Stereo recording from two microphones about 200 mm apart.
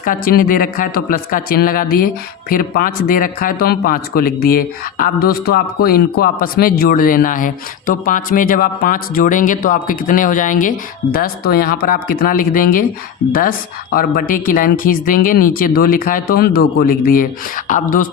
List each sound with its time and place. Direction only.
0.0 s speech: 45° left (ahead or behind)
13.9 s speech: 45° left (ahead or behind)